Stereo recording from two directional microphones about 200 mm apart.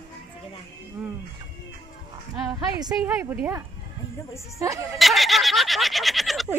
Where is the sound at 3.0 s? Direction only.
10° right (ahead or behind).